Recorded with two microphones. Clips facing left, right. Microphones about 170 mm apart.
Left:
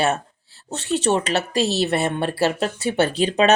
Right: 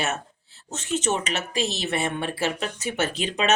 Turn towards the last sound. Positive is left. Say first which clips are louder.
# left 7 dB
turn(degrees=35)  # may be behind; listen again after turning